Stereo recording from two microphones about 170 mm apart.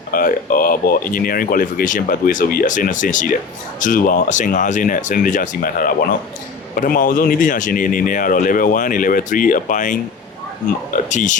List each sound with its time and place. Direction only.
0.1 s a man's voice: 55° left (ahead or behind)